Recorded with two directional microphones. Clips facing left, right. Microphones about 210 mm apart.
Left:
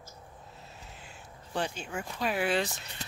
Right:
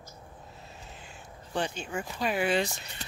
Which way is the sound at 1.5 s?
5° left (ahead or behind).